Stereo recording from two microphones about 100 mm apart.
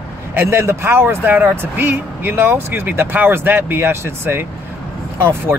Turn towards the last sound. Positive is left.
turn(degrees=-20)  # may be behind; listen again after turning